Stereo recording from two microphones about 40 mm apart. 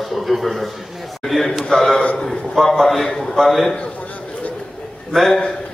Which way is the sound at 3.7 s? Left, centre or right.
Left.